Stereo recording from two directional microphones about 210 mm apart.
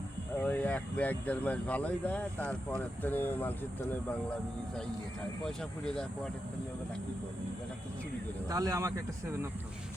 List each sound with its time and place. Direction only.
0.4 s speech: 5° left (ahead or behind)
5.5 s speech: 5° left (ahead or behind)
8.4 s speech: 15° right (ahead or behind)